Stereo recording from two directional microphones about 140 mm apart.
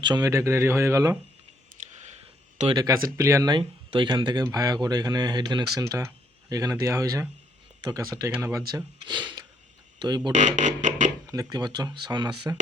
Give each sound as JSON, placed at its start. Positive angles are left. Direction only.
{"t": 0.0, "sound": "speech", "side_deg": -30}
{"t": 2.0, "sound": "a sound", "side_deg": -45}
{"t": 2.7, "sound": "speech", "side_deg": -25}
{"t": 3.6, "sound": "speech", "side_deg": -35}
{"t": 5.8, "sound": "speech", "side_deg": -20}
{"t": 10.3, "sound": "a sound", "side_deg": -60}
{"t": 11.3, "sound": "speech", "side_deg": -25}